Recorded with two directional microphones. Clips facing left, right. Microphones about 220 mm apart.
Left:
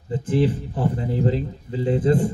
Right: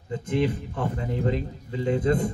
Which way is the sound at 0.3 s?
35° left (ahead or behind).